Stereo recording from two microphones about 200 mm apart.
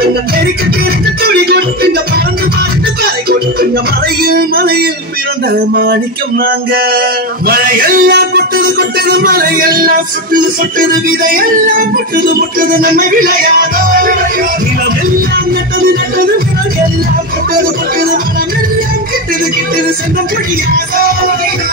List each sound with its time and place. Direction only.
1.2 s music: 50° right (ahead or behind)
4.2 s male singing: 50° right (ahead or behind)
6.4 s male singing: 50° right (ahead or behind)
12.4 s male singing: 45° right (ahead or behind)